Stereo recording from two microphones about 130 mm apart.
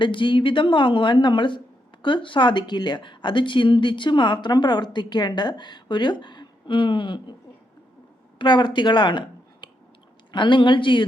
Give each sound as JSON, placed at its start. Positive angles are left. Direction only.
{"t": 0.0, "sound": "speech", "side_deg": 40}
{"t": 8.4, "sound": "a woman's voice", "side_deg": 35}